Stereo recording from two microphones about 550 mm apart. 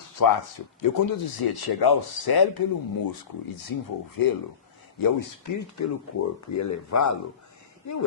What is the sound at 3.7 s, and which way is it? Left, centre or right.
Speech, left.